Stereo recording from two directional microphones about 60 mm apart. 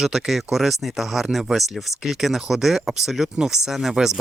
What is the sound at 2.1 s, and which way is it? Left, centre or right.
Speech, centre.